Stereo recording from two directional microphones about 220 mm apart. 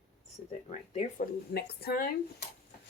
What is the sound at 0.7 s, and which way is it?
Speech, 30° left (ahead or behind).